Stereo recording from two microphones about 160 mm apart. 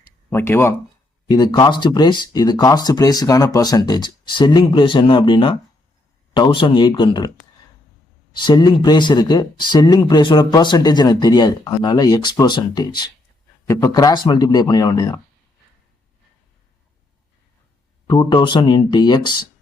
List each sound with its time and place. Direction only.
0.3 s speech: 15° left (ahead or behind)
1.3 s speech: 25° left (ahead or behind)
8.4 s speech: 25° left (ahead or behind)
18.1 s speech: 25° left (ahead or behind)